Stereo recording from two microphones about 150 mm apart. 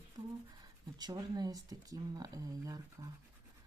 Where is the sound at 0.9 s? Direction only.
25° right (ahead or behind).